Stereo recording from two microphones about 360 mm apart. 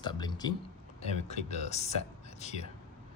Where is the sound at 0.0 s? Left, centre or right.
Centre.